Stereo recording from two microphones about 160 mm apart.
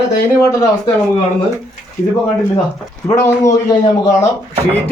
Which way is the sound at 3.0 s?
20° left (ahead or behind).